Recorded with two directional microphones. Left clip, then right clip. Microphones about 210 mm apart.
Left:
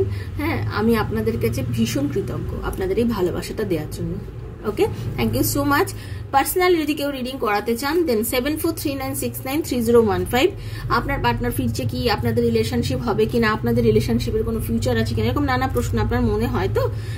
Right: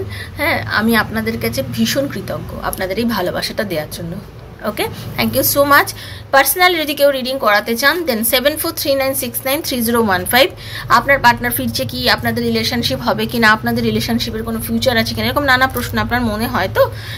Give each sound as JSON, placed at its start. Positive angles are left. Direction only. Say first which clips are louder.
{"t": 0.4, "sound": "a woman's voice", "louder": "right 8 dB", "side_deg": 10}
{"t": 2.6, "sound": "a woman's voice", "louder": "right 2 dB", "side_deg": 5}
{"t": 9.6, "sound": "a woman's voice", "louder": "right 3 dB", "side_deg": -30}
{"t": 9.8, "sound": "a woman's voice", "louder": "right 1 dB", "side_deg": 5}